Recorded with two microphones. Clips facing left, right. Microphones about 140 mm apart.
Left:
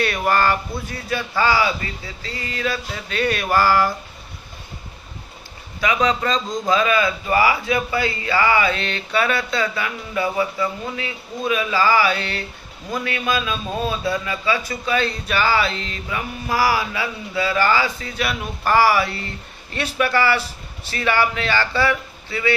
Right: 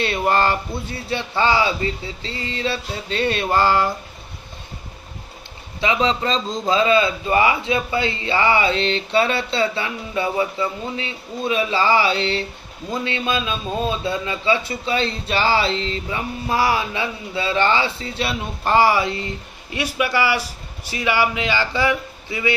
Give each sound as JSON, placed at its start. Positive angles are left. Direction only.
{"t": 0.0, "sound": "a man's voice", "side_deg": -25}
{"t": 5.8, "sound": "a man's voice", "side_deg": -25}